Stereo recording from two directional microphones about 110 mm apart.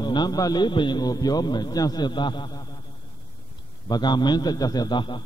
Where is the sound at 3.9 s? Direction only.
40° left (ahead or behind).